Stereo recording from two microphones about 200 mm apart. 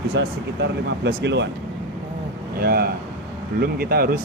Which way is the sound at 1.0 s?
60° right (ahead or behind).